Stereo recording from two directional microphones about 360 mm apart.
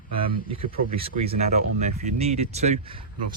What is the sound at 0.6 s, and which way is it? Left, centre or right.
Speech, centre.